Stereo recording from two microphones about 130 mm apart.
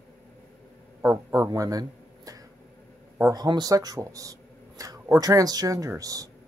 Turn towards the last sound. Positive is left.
turn(degrees=-25)  # may be behind; listen again after turning